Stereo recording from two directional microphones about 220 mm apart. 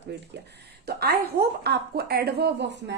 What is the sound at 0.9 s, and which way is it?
A woman's voice, 45° right (ahead or behind).